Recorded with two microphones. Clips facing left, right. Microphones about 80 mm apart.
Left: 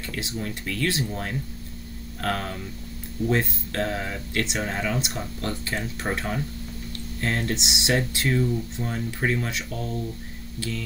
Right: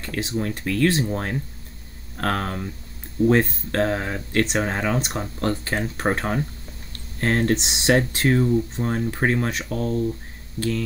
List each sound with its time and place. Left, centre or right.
0.0 s speech: right
10.6 s speech: right